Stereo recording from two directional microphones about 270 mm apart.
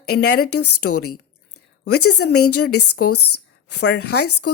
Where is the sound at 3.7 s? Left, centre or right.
Left.